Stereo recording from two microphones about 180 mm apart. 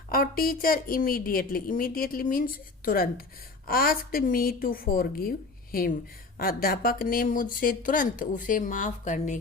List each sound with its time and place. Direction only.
0.1 s speech: 55° left (ahead or behind)
6.3 s speech: 55° left (ahead or behind)